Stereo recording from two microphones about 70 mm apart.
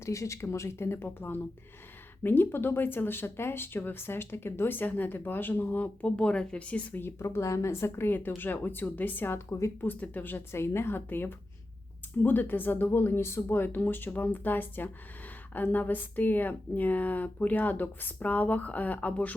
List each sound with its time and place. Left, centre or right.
0.0 s speech: left; by 7.0 s centre
7.2 s speech: left
9.5 s speech: left
9.8 s speech: left